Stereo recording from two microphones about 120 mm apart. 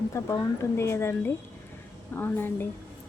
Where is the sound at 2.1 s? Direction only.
15° left (ahead or behind).